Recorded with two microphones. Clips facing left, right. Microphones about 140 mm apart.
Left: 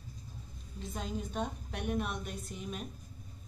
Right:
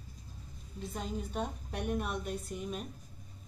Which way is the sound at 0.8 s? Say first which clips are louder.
Even; 5° right (ahead or behind).